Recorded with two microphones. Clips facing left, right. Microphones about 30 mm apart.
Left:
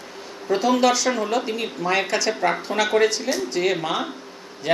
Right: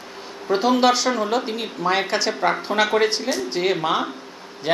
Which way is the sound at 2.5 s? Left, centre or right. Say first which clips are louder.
Right 1 dB; right.